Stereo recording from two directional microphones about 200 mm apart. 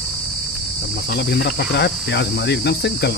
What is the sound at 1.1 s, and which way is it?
Speech, 55° left (ahead or behind).